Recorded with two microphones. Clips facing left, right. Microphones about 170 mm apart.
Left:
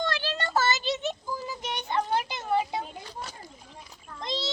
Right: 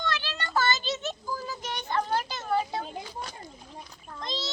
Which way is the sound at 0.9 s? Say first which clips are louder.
Left 2 dB; 15° left (ahead or behind).